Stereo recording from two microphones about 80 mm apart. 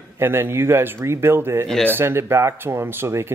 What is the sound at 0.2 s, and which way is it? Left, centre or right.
Speech, right.